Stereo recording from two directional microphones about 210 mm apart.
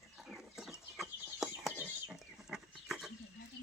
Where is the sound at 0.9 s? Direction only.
Centre (ahead or behind).